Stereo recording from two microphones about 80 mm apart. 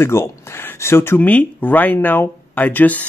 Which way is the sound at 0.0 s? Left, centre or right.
Left.